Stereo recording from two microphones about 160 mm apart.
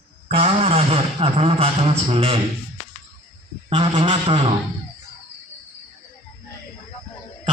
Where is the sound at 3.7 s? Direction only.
35° right (ahead or behind).